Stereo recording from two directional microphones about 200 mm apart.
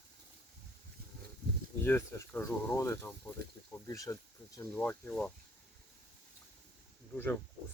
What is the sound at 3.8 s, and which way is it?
Bee, 15° left (ahead or behind).